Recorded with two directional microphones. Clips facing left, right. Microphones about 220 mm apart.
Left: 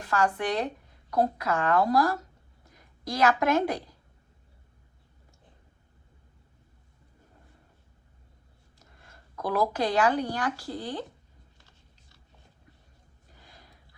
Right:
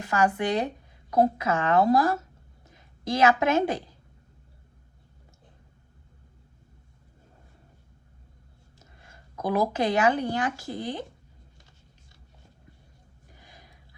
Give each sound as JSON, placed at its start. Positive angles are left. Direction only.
{"t": 0.0, "sound": "a woman's voice", "side_deg": -20}
{"t": 9.3, "sound": "speech", "side_deg": -20}
{"t": 13.4, "sound": "gasp", "side_deg": -20}